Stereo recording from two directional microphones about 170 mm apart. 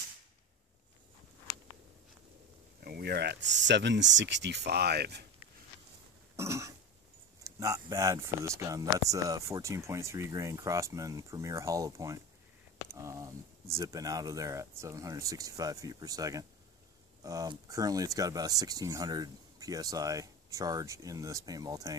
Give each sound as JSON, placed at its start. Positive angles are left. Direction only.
{"t": 2.8, "sound": "speech", "side_deg": -70}
{"t": 6.3, "sound": "a sound", "side_deg": -15}
{"t": 7.4, "sound": "speech", "side_deg": -20}